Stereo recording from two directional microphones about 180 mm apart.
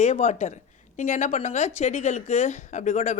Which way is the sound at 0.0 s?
40° left (ahead or behind).